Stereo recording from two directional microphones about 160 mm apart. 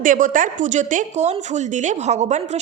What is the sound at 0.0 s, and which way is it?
A woman's voice, 55° right (ahead or behind).